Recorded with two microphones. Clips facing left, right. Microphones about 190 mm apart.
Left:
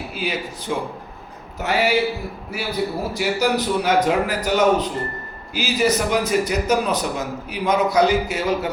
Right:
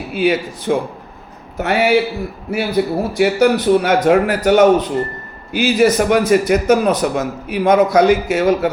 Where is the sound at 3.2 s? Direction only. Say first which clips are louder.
Right 7 dB; 55° right (ahead or behind).